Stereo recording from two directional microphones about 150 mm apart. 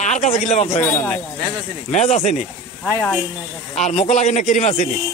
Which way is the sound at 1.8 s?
45° left (ahead or behind).